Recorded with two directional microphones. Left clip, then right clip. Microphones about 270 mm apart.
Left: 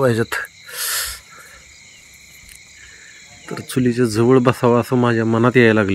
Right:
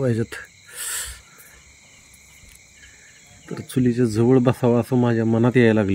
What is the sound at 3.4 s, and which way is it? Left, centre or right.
Speech, centre.